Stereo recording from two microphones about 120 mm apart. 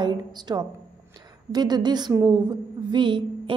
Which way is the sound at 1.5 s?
35° right (ahead or behind).